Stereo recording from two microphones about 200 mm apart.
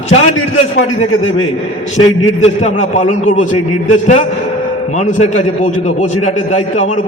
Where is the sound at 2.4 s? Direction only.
35° left (ahead or behind).